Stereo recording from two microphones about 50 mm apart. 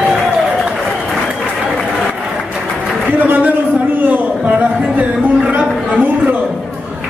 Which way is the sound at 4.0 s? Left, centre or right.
Right.